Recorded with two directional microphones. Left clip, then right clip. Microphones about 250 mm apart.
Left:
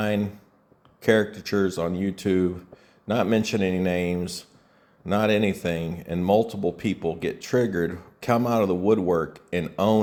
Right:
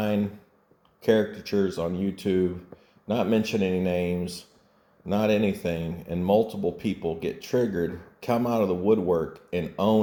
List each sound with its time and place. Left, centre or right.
0.0 s speech: left